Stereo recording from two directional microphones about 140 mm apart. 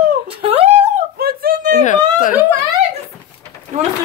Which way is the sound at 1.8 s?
70° left (ahead or behind).